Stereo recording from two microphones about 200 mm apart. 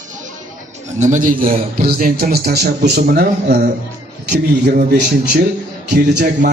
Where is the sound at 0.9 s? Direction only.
35° right (ahead or behind); by 5.3 s 55° right (ahead or behind).